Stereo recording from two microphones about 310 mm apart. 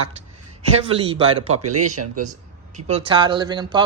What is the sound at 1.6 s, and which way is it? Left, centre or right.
Speech, right.